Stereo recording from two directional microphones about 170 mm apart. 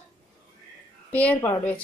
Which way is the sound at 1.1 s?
10° left (ahead or behind).